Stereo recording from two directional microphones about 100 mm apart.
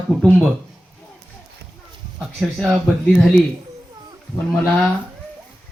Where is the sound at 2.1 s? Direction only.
Centre (ahead or behind).